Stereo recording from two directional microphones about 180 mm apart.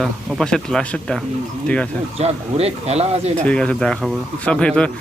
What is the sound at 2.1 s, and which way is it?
Speech, 35° right (ahead or behind).